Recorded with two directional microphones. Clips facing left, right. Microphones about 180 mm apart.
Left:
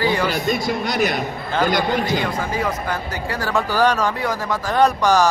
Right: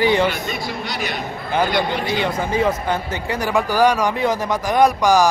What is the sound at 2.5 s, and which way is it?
Speech, 25° right (ahead or behind).